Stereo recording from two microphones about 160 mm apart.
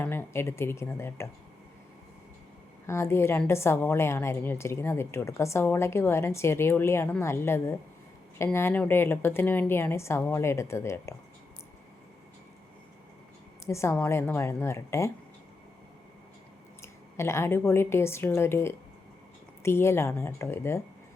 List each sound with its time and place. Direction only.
0.0 s a woman's voice: 15° left (ahead or behind)
2.8 s a woman's voice: 15° left (ahead or behind)
13.7 s a woman's voice: 20° left (ahead or behind)
16.8 s a woman's voice: 15° left (ahead or behind)